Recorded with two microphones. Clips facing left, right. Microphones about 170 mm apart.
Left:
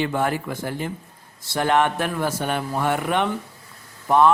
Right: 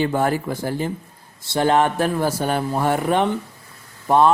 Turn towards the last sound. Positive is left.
turn(degrees=-30)  # may be behind; listen again after turning